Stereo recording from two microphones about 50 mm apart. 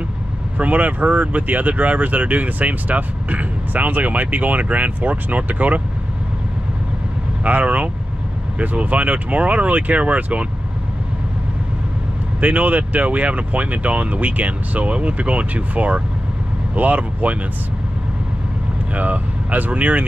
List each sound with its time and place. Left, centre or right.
0.6 s speech: right
7.4 s speech: right
12.4 s speech: right
18.9 s speech: right